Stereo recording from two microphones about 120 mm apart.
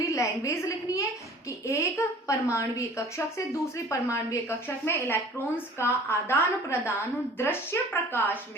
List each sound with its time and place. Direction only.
0.0 s a woman's voice: 25° left (ahead or behind)